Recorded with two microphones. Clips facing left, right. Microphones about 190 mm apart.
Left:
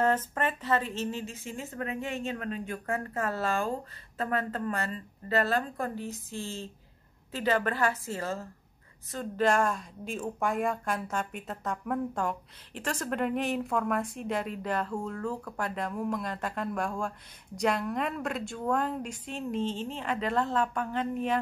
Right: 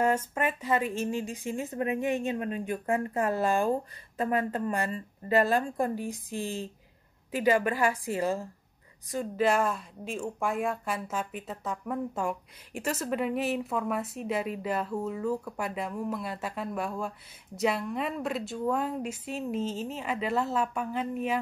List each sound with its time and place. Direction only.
0.0 s a woman's voice: 10° right (ahead or behind)